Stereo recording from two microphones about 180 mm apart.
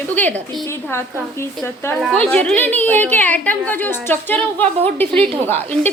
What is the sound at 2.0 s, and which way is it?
A woman's voice, centre (ahead or behind).